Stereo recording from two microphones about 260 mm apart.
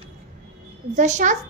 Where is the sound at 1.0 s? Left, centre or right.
Right.